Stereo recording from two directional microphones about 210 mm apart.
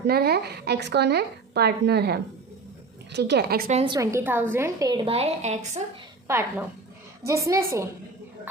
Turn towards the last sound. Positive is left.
turn(degrees=-15)  # may be behind; listen again after turning